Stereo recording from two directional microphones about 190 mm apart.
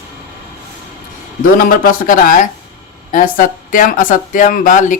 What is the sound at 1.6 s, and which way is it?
Speech, 50° left (ahead or behind).